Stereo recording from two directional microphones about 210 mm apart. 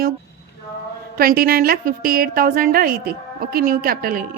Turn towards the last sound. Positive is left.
turn(degrees=-45)  # may be behind; listen again after turning